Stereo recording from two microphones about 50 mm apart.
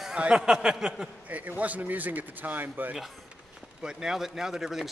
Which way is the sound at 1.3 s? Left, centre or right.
Right.